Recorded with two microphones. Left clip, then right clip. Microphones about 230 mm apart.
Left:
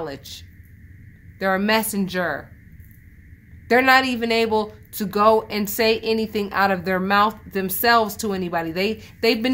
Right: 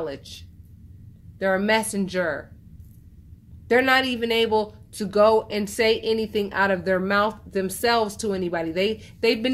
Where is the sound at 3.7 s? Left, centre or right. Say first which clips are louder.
Left 3 dB; left.